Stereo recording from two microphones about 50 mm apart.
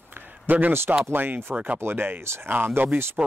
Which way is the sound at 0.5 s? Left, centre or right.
Right.